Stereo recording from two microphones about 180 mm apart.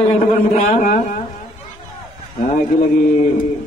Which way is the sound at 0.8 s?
45° left (ahead or behind).